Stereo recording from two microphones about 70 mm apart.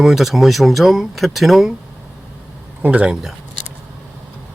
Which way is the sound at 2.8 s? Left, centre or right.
Right.